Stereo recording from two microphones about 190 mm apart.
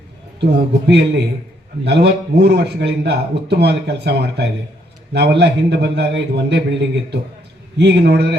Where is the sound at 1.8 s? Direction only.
60° right (ahead or behind).